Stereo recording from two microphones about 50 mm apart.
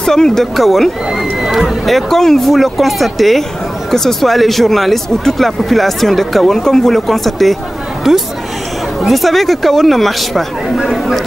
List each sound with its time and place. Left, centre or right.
0.0 s speech: centre